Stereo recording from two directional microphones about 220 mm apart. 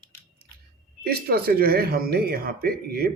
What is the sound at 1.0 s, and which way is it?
Speech, 45° right (ahead or behind).